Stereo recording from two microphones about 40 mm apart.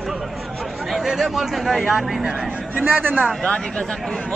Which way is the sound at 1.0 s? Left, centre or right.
Centre.